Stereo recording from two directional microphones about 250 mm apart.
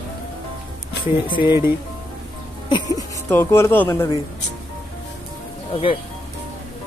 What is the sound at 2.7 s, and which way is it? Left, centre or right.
Speech, centre.